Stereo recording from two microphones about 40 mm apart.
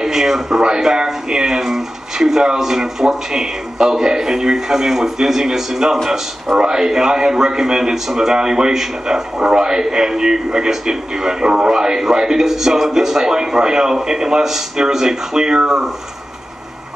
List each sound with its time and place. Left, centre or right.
0.0 s a man's voice: centre